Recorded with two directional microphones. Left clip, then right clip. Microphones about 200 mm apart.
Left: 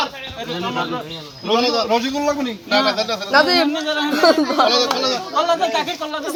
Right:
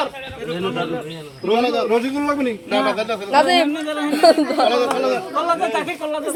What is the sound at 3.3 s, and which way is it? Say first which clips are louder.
Speech: even; 30° left (ahead or behind).